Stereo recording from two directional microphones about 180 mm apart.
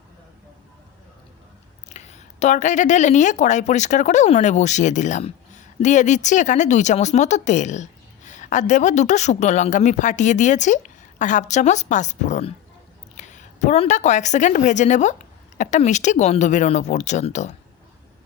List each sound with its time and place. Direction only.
1.9 s a woman's voice: 40° left (ahead or behind)